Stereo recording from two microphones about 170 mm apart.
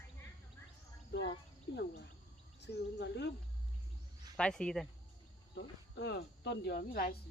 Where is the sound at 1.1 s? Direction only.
90° left.